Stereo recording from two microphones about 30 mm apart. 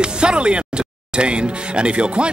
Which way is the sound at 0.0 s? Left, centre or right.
Right.